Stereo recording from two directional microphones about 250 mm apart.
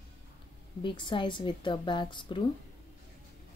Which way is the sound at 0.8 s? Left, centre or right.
Centre.